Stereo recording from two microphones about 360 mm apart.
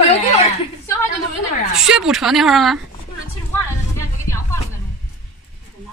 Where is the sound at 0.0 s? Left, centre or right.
Centre.